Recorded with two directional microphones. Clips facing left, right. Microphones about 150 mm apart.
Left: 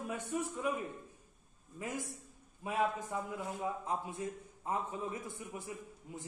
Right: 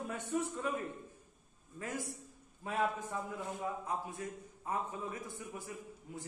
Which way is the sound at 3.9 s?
25° left (ahead or behind).